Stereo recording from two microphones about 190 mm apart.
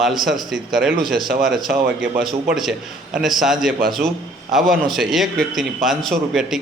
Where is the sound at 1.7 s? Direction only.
55° right (ahead or behind).